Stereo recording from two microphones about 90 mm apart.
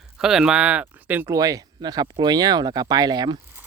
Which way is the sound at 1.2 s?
40° right (ahead or behind).